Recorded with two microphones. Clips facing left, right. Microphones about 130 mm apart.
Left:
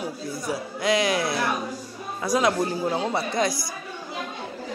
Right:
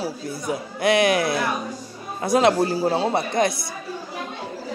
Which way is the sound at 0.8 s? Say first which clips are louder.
Right 4 dB; 60° right (ahead or behind).